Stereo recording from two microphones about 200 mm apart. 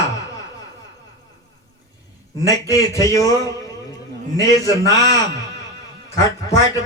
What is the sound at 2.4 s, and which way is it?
A man's voice, 15° left (ahead or behind).